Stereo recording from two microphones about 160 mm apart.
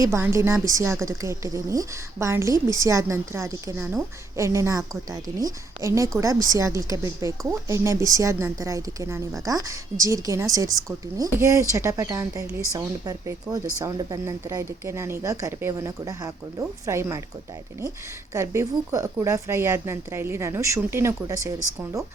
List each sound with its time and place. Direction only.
0.0 s a woman's voice: 15° right (ahead or behind)
18.3 s speech: 20° right (ahead or behind)